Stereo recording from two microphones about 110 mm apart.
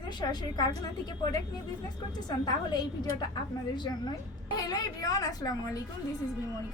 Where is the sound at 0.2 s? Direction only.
40° left (ahead or behind).